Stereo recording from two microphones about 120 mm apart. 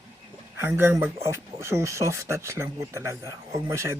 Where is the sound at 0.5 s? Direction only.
20° right (ahead or behind).